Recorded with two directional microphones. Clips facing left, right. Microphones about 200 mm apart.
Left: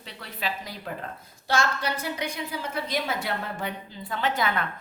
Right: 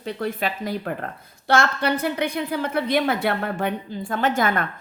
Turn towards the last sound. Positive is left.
turn(degrees=-45)  # may be behind; listen again after turning